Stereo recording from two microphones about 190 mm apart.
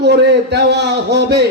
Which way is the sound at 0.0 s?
60° right (ahead or behind).